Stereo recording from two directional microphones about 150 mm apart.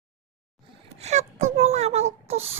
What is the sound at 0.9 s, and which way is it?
Wail, 45° right (ahead or behind).